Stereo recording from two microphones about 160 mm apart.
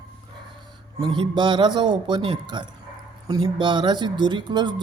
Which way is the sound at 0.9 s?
30° right (ahead or behind).